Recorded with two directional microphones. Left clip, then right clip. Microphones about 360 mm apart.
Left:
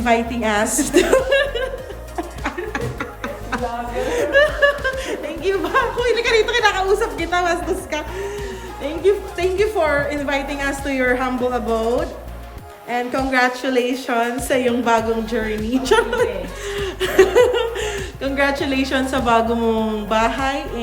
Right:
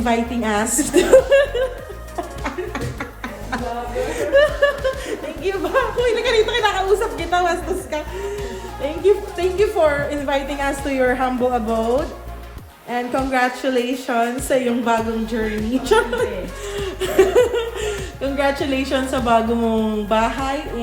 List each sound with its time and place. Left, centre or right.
0.0 s a woman's voice: centre
2.1 s music: centre
3.5 s a sound: centre
4.2 s a woman's voice: centre